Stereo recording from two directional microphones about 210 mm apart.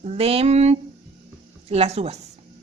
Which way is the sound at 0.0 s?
30° right (ahead or behind).